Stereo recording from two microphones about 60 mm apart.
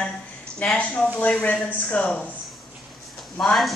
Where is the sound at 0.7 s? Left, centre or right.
Left.